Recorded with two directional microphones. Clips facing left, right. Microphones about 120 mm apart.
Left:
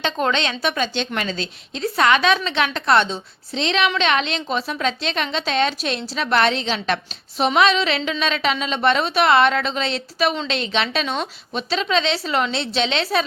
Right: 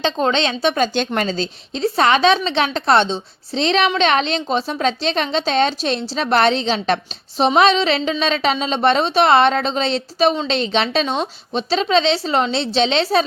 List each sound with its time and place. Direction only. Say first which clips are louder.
0.0 s a woman's voice: right 3 dB; 30° right (ahead or behind)
0.8 s a woman's voice: right 5 dB; 40° right (ahead or behind)